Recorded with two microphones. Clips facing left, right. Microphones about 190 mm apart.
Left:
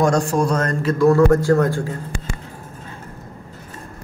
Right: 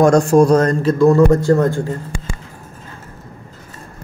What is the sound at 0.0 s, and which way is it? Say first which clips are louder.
A man's voice: right 7 dB; 45° right (ahead or behind).